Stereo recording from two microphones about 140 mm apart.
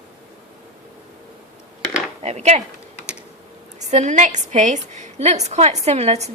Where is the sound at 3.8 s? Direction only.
60° right (ahead or behind).